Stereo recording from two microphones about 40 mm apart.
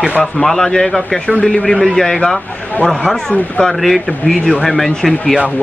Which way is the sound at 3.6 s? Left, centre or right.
Centre.